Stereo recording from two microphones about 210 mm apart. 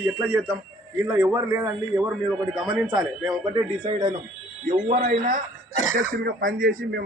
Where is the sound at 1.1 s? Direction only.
15° right (ahead or behind).